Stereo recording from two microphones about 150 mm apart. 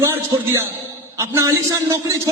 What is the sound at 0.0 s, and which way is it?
A man's voice, 15° right (ahead or behind).